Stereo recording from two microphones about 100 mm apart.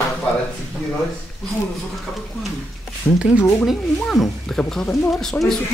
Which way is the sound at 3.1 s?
15° left (ahead or behind).